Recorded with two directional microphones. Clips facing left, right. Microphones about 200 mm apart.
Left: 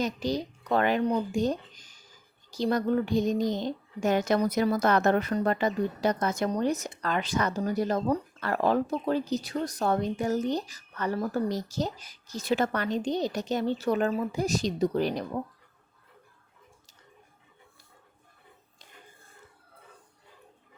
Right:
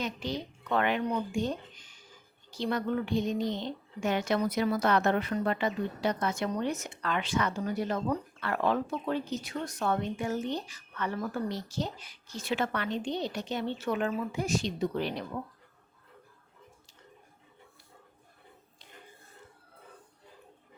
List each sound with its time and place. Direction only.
0.0 s speech: 40° left (ahead or behind)